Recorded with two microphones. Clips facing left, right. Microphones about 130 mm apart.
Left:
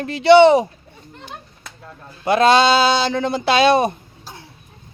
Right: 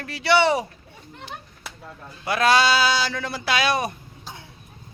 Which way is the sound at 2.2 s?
25° left (ahead or behind).